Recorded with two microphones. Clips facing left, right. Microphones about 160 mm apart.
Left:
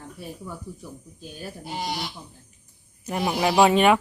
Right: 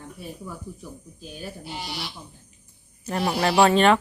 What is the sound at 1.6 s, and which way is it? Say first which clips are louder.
Speech: left 8 dB; 45° left (ahead or behind).